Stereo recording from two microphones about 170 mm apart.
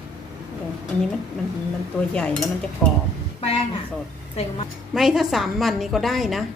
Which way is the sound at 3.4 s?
35° left (ahead or behind).